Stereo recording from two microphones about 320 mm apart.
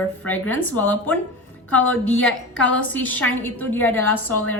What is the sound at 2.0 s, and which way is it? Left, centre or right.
Speech, left.